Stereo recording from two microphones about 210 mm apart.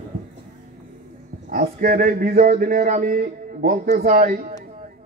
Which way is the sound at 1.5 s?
45° right (ahead or behind).